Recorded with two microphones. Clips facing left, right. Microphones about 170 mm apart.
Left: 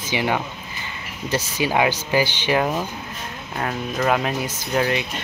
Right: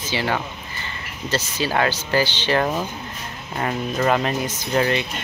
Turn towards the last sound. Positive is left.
turn(degrees=5)  # may be behind; listen again after turning